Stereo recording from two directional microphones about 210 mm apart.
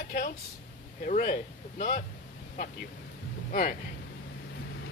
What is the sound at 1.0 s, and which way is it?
Speech, 40° left (ahead or behind).